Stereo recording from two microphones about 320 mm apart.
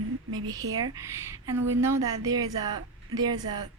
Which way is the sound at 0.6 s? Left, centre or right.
Right.